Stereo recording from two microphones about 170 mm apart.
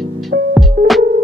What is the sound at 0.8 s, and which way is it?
Music, 55° right (ahead or behind).